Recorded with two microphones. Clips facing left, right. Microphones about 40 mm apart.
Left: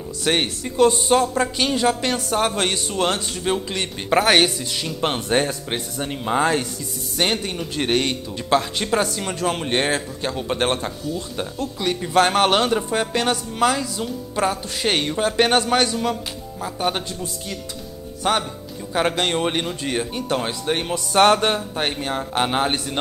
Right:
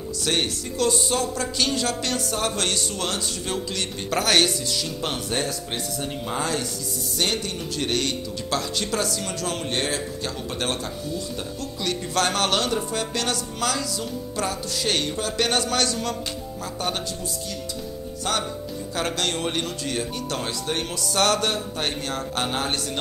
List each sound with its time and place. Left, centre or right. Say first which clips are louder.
0.2 s speech: left 4 dB; left
11.8 s a man's voice: left 6 dB; left
18.2 s a man's voice: left 5 dB; left